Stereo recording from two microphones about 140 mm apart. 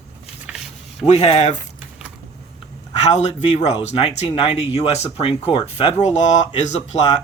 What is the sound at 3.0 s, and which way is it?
Speech, 55° left (ahead or behind).